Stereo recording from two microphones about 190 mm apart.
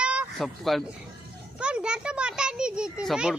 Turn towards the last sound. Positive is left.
turn(degrees=-5)  # may be behind; listen again after turning